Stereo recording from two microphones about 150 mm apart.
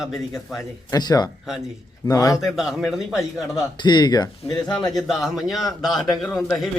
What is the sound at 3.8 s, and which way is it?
Speech, 30° left (ahead or behind).